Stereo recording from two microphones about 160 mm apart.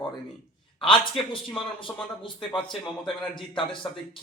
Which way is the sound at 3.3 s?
30° left (ahead or behind).